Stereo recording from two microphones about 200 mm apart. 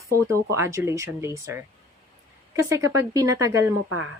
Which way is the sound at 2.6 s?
15° right (ahead or behind).